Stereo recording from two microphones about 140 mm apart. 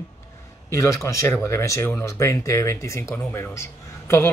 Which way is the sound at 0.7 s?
20° left (ahead or behind).